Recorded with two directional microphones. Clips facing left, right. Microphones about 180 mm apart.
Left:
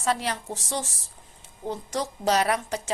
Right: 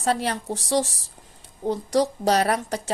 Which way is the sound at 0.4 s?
35° right (ahead or behind).